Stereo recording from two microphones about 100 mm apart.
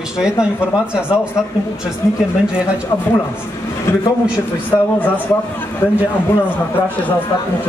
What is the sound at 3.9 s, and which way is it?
A man's voice, 25° left (ahead or behind).